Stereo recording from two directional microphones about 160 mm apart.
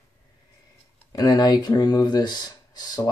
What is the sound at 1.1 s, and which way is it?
Speech, 20° left (ahead or behind).